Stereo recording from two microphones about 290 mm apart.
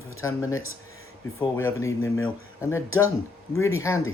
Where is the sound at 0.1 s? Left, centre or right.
Left.